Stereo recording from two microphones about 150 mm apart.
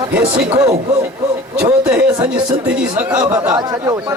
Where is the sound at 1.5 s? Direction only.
5° right (ahead or behind).